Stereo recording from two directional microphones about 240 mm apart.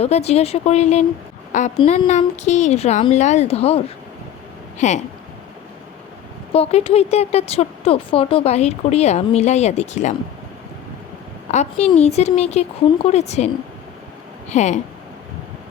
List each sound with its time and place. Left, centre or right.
0.0 s speech: left
6.5 s speech: left
11.5 s speech: left
14.5 s speech: left